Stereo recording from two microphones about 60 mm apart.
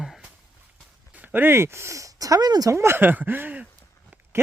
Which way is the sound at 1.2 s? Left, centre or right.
Right.